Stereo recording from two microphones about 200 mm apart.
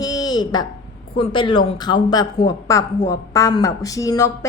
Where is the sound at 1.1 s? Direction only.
25° left (ahead or behind).